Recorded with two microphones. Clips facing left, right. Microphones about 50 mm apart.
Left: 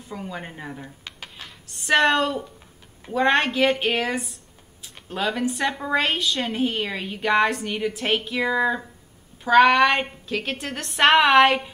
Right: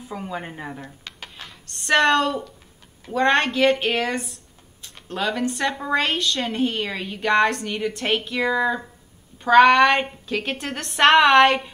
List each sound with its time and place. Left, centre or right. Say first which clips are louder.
0.0 s a woman's voice: right 3 dB; centre
1.0 s a sound: right 1 dB; centre
3.1 s speech: right 1 dB; centre